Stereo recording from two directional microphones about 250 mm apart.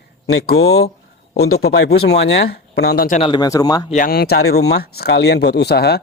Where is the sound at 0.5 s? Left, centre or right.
Left.